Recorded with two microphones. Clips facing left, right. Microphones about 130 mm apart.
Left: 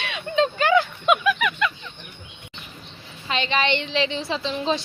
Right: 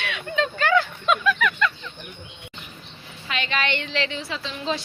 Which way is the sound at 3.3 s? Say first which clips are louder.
Left 4 dB; 25° left (ahead or behind).